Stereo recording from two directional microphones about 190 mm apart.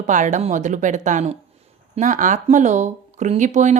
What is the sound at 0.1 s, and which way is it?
A woman's voice, 40° right (ahead or behind).